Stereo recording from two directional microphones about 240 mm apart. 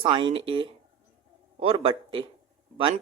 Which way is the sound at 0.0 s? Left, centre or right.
Right.